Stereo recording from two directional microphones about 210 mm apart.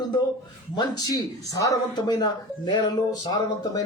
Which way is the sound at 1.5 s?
15° left (ahead or behind).